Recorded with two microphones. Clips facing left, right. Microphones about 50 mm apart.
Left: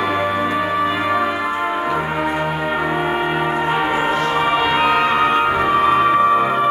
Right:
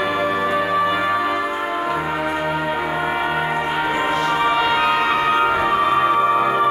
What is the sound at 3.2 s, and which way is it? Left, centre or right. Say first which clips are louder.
Gong: left 2 dB; centre.